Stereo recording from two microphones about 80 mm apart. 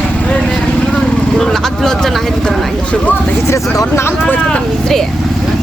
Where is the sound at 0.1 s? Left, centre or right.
Centre.